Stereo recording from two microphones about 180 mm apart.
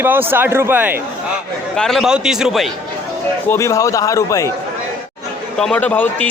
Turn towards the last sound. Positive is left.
turn(degrees=10)  # may be behind; listen again after turning